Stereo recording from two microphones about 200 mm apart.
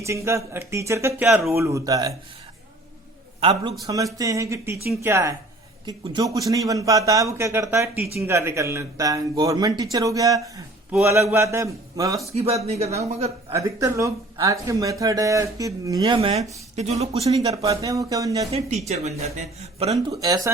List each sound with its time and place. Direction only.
0.0 s speech: 15° right (ahead or behind)
3.4 s speech: 25° right (ahead or behind)
6.5 s speech: 15° right (ahead or behind)
12.3 s speech: 30° right (ahead or behind)
13.5 s speech: 15° right (ahead or behind); by 17.2 s 35° right (ahead or behind)
17.3 s speech: 20° right (ahead or behind)
18.9 s speech: 35° right (ahead or behind)
20.1 s speech: 15° right (ahead or behind)